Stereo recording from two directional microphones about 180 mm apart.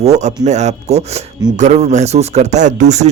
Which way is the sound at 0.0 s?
40° right (ahead or behind).